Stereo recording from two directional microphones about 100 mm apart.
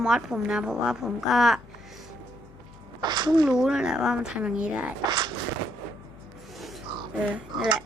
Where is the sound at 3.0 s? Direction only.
45° right (ahead or behind).